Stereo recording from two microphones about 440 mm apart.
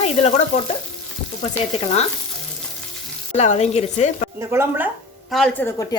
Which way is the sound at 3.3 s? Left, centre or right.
Centre.